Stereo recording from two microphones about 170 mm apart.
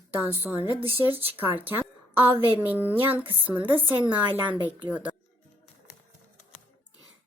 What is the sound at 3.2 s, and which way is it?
Speech, 30° right (ahead or behind).